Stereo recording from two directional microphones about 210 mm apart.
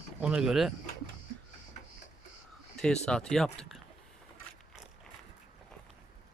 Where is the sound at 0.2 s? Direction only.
5° right (ahead or behind).